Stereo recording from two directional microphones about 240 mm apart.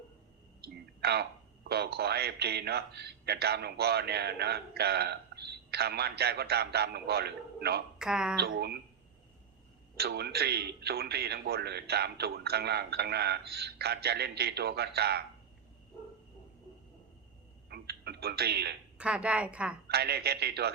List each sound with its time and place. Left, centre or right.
0.6 s speech: right
7.9 s speech: centre
8.4 s speech: right
10.0 s speech: right
17.7 s a sound: right
18.9 s a woman's voice: centre
19.9 s speech: right